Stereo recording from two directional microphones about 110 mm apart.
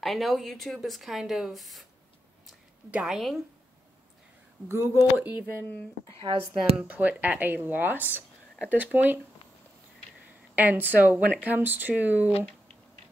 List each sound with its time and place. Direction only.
0.0 s speech: centre (ahead or behind)
2.9 s speech: 5° right (ahead or behind)
4.6 s speech: 20° right (ahead or behind)
6.1 s speech: 55° right (ahead or behind)
6.8 s speech: 15° right (ahead or behind)
10.5 s speech: 15° right (ahead or behind)